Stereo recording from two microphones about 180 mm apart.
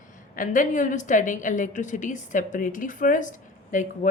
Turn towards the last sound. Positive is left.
turn(degrees=45)  # may be behind; listen again after turning